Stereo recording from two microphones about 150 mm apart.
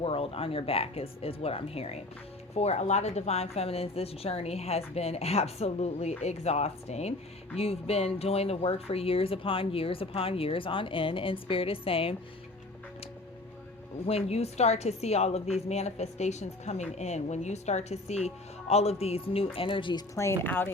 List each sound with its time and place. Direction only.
0.0 s a woman's voice: 40° left (ahead or behind)
14.1 s a woman's voice: 45° left (ahead or behind)
20.1 s speech: 15° left (ahead or behind)